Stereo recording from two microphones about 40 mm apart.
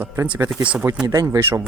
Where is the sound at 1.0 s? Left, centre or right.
Right.